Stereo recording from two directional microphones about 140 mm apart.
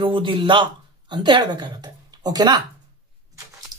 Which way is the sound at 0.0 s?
35° right (ahead or behind).